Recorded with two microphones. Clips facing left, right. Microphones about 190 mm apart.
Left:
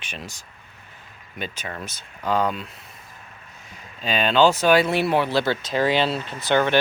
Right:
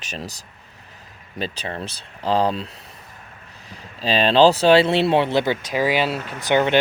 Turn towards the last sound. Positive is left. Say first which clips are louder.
# right 2 dB
turn(degrees=-15)  # may be behind; listen again after turning